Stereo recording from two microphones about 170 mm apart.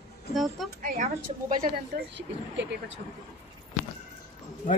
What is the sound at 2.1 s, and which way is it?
Speech, 90° right.